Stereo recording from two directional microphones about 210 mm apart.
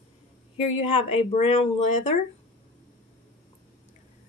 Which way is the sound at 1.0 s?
30° left (ahead or behind).